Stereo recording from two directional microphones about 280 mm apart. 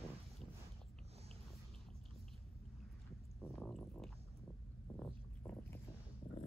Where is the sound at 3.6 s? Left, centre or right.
Centre.